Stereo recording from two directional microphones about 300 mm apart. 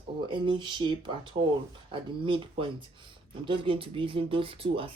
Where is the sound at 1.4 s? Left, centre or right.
Right.